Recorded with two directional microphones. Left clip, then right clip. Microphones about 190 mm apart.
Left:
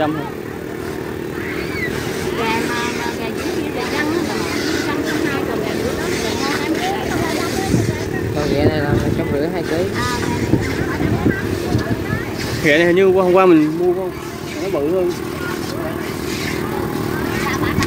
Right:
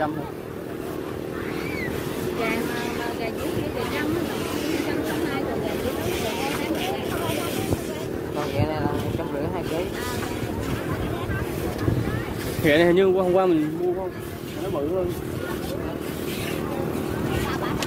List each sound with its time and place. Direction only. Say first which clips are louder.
12.6 s speech: left 5 dB; 10° right (ahead or behind)
13.2 s speech: left 8 dB; 5° left (ahead or behind)